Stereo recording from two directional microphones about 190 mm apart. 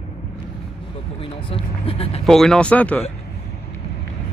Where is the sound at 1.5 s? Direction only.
30° left (ahead or behind).